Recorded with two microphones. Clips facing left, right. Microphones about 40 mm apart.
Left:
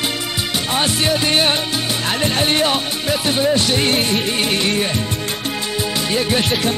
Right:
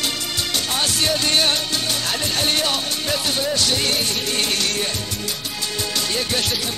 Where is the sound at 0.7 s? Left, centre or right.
Left.